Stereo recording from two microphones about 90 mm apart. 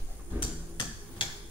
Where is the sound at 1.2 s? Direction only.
65° left (ahead or behind).